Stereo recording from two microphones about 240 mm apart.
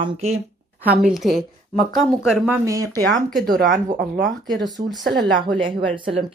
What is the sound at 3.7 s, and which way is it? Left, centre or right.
Speech, right.